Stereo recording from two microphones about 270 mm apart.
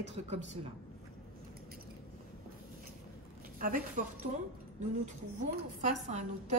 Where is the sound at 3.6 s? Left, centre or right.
Right.